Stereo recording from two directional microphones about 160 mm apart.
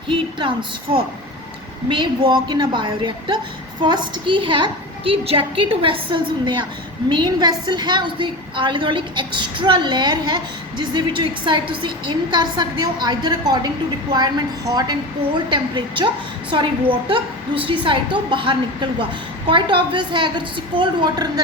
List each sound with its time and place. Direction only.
0.1 s a woman's voice: 30° right (ahead or behind)
1.9 s a woman's voice: 25° right (ahead or behind)